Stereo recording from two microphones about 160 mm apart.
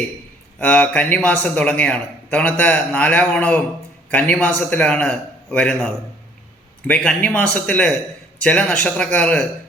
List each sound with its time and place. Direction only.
0.6 s a man's voice: 10° left (ahead or behind)